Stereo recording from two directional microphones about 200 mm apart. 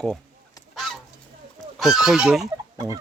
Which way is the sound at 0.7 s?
Centre (ahead or behind).